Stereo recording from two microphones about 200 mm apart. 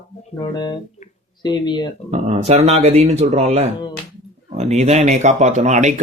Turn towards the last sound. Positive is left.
turn(degrees=-35)  # may be behind; listen again after turning